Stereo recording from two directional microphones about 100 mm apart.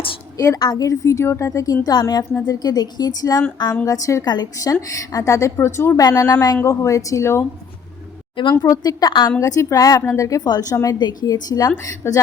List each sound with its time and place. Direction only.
0.3 s a woman's voice: 35° left (ahead or behind)
8.5 s a woman's voice: 35° left (ahead or behind)
9.4 s a woman's voice: 30° left (ahead or behind)